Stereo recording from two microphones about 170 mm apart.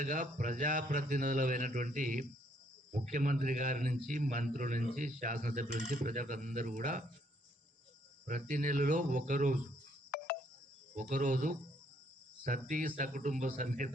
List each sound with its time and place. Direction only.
0.0 s a man's voice: 50° right (ahead or behind)
8.3 s a man's voice: 50° right (ahead or behind)
10.9 s a man's voice: 50° right (ahead or behind)